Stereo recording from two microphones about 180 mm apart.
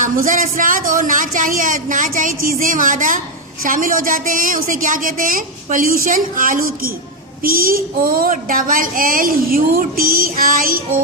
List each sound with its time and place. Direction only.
0.0 s speech: 50° right (ahead or behind)